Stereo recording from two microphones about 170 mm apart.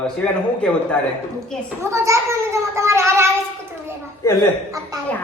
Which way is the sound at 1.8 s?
15° right (ahead or behind).